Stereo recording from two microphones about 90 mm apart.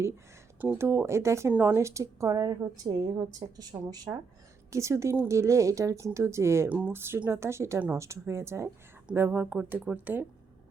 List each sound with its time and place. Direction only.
0.8 s a woman's voice: 30° right (ahead or behind); by 4.2 s 50° right (ahead or behind)
4.7 s a woman's voice: 35° right (ahead or behind)
6.7 s a woman's voice: 20° right (ahead or behind)